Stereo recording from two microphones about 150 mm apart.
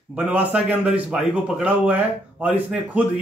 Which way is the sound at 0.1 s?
10° right (ahead or behind).